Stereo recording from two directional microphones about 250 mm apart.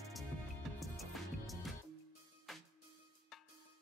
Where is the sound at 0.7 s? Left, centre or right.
Centre.